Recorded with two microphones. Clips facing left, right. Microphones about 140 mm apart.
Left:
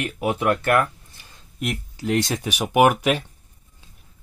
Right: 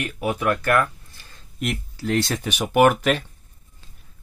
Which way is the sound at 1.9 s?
15° left (ahead or behind).